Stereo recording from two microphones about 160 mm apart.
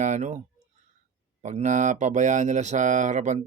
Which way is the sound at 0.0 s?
50° right (ahead or behind).